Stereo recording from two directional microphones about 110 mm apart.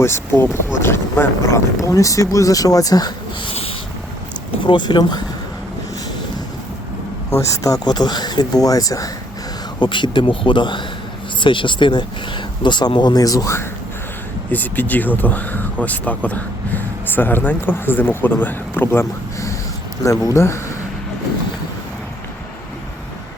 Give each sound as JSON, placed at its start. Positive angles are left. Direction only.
{"t": 0.0, "sound": "speech", "side_deg": 20}
{"t": 4.6, "sound": "speech", "side_deg": 45}
{"t": 7.3, "sound": "speech", "side_deg": 30}
{"t": 9.8, "sound": "speech", "side_deg": 45}
{"t": 14.5, "sound": "speech", "side_deg": 15}